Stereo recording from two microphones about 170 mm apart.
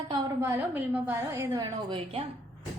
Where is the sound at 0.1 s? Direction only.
20° right (ahead or behind).